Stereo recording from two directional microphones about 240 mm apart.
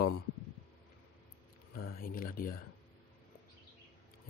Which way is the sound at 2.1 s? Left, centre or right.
Left.